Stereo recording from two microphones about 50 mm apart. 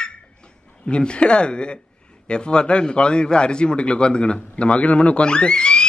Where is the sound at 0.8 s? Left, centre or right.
Centre.